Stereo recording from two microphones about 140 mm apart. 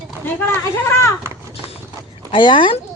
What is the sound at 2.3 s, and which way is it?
Speech, 35° left (ahead or behind).